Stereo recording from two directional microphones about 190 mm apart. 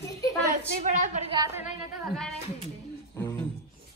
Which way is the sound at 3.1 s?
15° left (ahead or behind).